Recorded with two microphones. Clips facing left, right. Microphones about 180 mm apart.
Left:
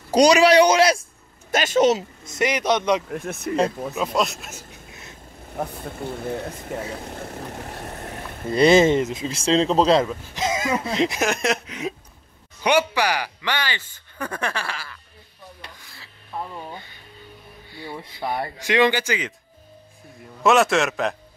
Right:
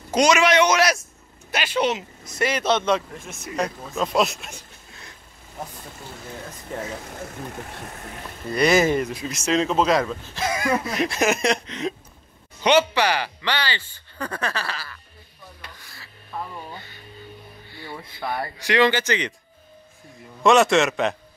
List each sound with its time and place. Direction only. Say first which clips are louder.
0.1 s a man's voice: left 4 dB; 35° left (ahead or behind)
1.5 s speech: left 5 dB; 45° left (ahead or behind)
2.2 s speech: left 1 dB; 20° left (ahead or behind)
3.1 s speech: left 9 dB; 60° left (ahead or behind)
3.9 s a man's voice: right 1 dB; centre (ahead or behind)
5.6 s speech: left 8 dB; 60° left (ahead or behind)
8.5 s speech: left 4 dB; 25° left (ahead or behind)
10.0 s speech: left 1 dB; 10° left (ahead or behind)
11.1 s a man's voice: right 2 dB; centre (ahead or behind)
16.0 s a sound: left 1 dB; 15° left (ahead or behind)
17.8 s speech: left 2 dB; 20° left (ahead or behind)
20.4 s a man's voice: right 1 dB; centre (ahead or behind)